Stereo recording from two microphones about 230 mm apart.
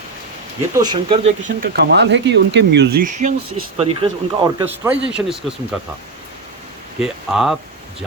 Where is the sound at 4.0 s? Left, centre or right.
Centre.